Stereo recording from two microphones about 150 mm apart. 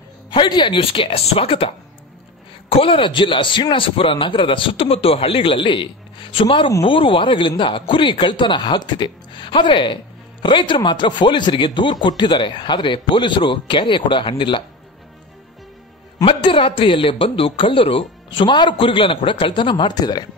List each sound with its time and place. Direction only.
0.3 s speech: 30° left (ahead or behind)
2.7 s speech: 35° left (ahead or behind)
16.2 s speech: 35° left (ahead or behind)